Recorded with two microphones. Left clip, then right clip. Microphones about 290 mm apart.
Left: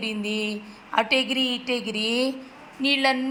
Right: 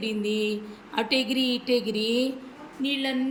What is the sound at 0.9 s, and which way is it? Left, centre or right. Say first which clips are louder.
A woman's voice: left 4 dB; centre.